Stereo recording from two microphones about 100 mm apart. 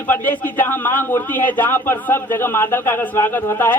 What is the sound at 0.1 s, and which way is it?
A man's voice, 20° left (ahead or behind).